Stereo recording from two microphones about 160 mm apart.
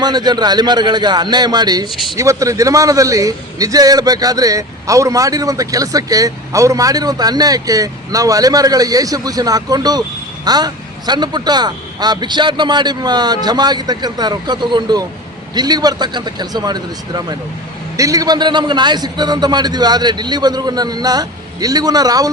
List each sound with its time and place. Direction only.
0.0 s a man's voice: 25° right (ahead or behind)